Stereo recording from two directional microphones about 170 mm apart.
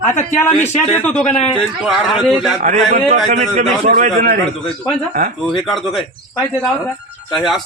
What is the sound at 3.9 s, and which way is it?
A man's voice, 55° right (ahead or behind).